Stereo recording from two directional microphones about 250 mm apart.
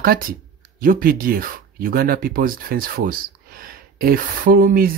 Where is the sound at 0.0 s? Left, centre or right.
Right.